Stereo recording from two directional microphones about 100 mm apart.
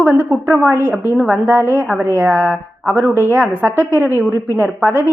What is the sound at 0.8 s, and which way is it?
A woman's voice, 25° right (ahead or behind).